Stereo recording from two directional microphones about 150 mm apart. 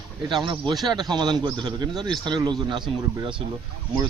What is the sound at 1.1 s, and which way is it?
Speech, 30° right (ahead or behind).